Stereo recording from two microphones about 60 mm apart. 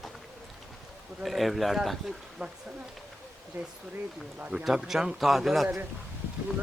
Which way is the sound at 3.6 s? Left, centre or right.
Right.